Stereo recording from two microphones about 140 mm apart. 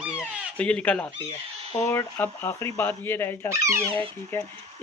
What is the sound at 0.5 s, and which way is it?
Speech, 10° left (ahead or behind).